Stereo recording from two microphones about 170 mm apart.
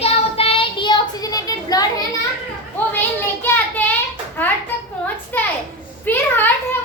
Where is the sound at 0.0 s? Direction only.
35° left (ahead or behind).